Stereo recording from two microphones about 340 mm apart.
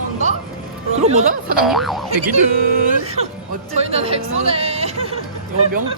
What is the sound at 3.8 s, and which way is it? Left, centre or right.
Speech, centre.